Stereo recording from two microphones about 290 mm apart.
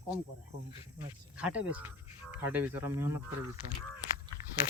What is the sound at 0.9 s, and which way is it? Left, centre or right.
Speech, centre.